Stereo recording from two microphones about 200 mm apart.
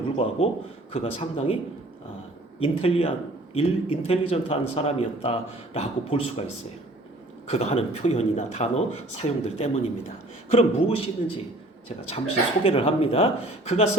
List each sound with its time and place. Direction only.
0.2 s a man's voice: 30° left (ahead or behind)
2.6 s a man's voice: 30° left (ahead or behind)
7.5 s a man's voice: 30° left (ahead or behind)